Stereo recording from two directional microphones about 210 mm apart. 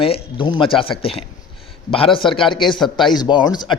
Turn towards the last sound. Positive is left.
turn(degrees=20)  # may be behind; listen again after turning